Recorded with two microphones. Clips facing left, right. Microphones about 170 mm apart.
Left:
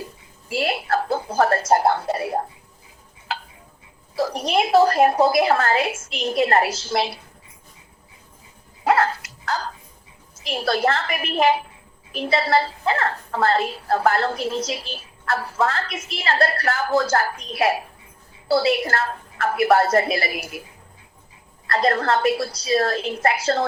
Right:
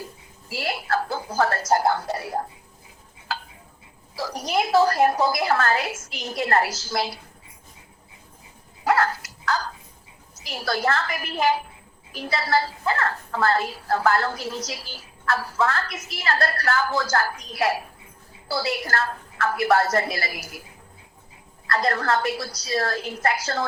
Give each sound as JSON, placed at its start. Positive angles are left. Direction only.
{"t": 0.5, "sound": "a woman's voice", "side_deg": 25}
{"t": 4.3, "sound": "a woman's voice", "side_deg": 25}
{"t": 8.8, "sound": "dog", "side_deg": 25}
{"t": 10.3, "sound": "a woman's voice", "side_deg": 25}
{"t": 21.8, "sound": "a woman's voice", "side_deg": 25}